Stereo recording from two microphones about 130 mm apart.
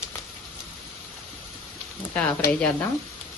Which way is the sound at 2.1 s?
15° left (ahead or behind).